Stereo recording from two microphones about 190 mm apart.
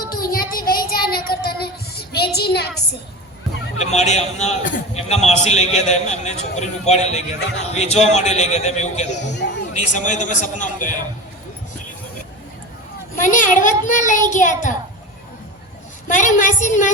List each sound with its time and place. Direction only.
0.0 s child singing: 50° left (ahead or behind)
3.9 s a man's voice: 35° left (ahead or behind)
9.3 s a sound: 65° left (ahead or behind)
9.7 s a man's voice: 40° left (ahead or behind)
13.2 s a child's voice: 45° left (ahead or behind)
16.0 s a man's voice: 40° left (ahead or behind)